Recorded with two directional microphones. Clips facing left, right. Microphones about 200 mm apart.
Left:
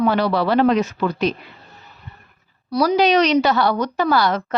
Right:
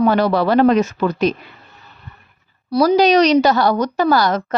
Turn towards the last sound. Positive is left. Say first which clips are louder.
# right 2 dB
turn(degrees=-40)  # may be behind; listen again after turning